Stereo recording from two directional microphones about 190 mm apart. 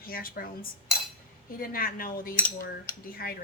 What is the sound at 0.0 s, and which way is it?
Speech, 50° left (ahead or behind).